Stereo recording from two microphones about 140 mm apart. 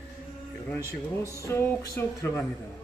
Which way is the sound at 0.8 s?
20° right (ahead or behind).